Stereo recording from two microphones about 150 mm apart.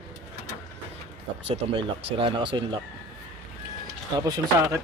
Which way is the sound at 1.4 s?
40° right (ahead or behind).